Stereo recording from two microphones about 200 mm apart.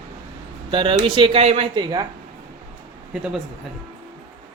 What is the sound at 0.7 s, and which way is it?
Speech, 25° right (ahead or behind).